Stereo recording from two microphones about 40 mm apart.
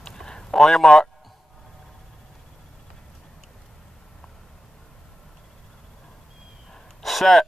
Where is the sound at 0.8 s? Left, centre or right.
Centre.